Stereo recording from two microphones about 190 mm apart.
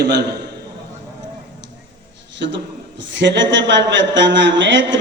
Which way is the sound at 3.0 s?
70° right (ahead or behind).